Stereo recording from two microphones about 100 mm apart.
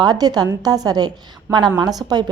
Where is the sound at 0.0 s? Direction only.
40° right (ahead or behind).